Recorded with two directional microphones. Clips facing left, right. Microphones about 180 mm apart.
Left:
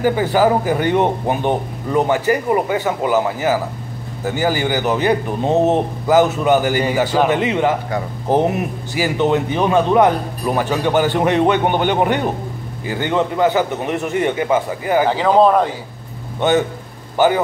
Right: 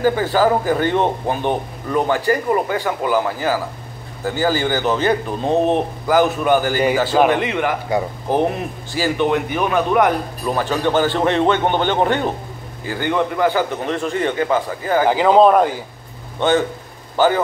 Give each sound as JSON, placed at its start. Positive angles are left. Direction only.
{"t": 0.0, "sound": "a man's voice", "side_deg": 15}
{"t": 15.0, "sound": "speech", "side_deg": -5}
{"t": 16.3, "sound": "a man's voice", "side_deg": 15}